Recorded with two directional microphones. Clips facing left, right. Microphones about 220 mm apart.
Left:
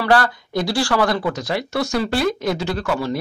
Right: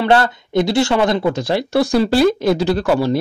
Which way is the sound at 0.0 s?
25° right (ahead or behind).